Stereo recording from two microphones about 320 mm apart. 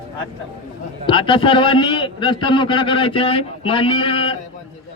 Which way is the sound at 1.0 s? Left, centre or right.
Centre.